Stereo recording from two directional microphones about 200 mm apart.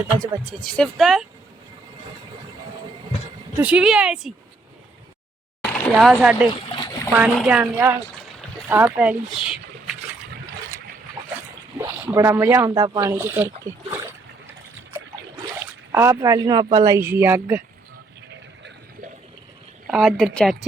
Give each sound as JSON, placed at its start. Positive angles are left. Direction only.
{"t": 0.6, "sound": "speech", "side_deg": 5}
{"t": 3.6, "sound": "speech", "side_deg": -5}
{"t": 5.6, "sound": "a sound", "side_deg": 10}
{"t": 5.9, "sound": "speech", "side_deg": 0}
{"t": 6.5, "sound": "splash", "side_deg": 20}
{"t": 7.3, "sound": "speech", "side_deg": -5}
{"t": 11.8, "sound": "speech", "side_deg": -15}
{"t": 15.9, "sound": "speech", "side_deg": -15}
{"t": 19.9, "sound": "speech", "side_deg": 0}